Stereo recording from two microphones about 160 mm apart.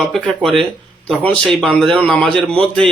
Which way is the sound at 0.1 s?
Centre (ahead or behind).